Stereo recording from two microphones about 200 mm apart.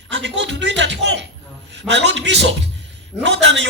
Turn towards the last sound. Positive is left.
turn(degrees=-65)  # may be behind; listen again after turning